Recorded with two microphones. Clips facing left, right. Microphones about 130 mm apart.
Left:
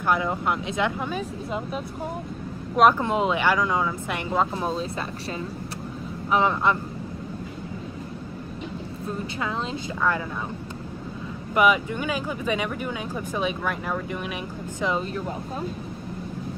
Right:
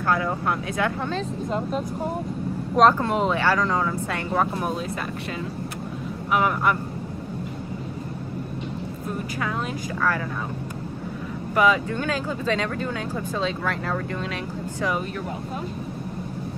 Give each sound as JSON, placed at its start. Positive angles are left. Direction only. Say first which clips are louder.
{"t": 0.1, "sound": "speech", "louder": "even", "side_deg": 20}
{"t": 6.3, "sound": "speech", "louder": "even", "side_deg": 25}
{"t": 11.5, "sound": "speech", "louder": "even", "side_deg": 20}